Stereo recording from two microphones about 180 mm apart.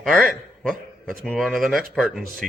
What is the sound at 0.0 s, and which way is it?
A man's voice, centre (ahead or behind).